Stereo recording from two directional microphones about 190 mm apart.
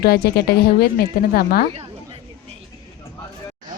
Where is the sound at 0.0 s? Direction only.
55° left (ahead or behind).